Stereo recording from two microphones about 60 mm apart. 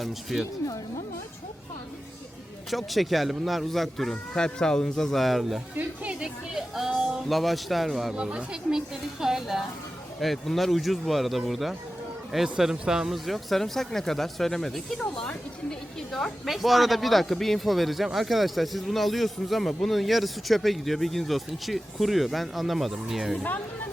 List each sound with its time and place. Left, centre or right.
0.0 s speech: centre
2.6 s speech: centre
5.7 s speech: right; by 8.1 s centre
8.1 s speech: centre
9.2 s speech: centre
15.0 s speech: centre
16.5 s speech: centre